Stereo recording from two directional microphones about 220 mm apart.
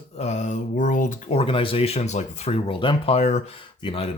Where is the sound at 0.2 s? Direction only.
30° left (ahead or behind).